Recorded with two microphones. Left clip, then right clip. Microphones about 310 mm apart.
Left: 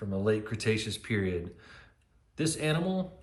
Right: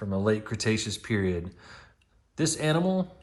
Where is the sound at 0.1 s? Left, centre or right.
Right.